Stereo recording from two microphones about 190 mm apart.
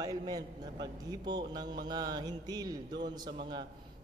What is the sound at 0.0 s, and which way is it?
Mantra, 20° right (ahead or behind).